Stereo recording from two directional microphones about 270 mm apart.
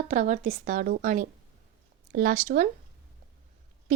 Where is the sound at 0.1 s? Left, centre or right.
Right.